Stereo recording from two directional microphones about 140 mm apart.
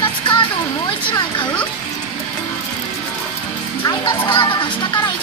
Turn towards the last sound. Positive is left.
turn(degrees=35)  # may be behind; listen again after turning